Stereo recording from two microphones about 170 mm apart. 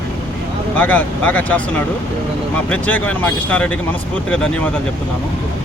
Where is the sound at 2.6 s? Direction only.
10° left (ahead or behind).